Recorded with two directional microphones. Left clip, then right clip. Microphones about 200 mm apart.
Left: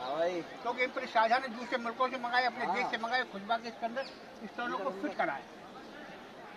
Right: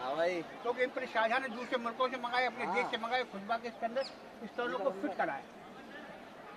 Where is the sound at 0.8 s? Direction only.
20° right (ahead or behind).